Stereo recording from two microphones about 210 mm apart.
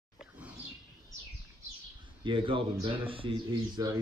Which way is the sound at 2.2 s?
25° right (ahead or behind).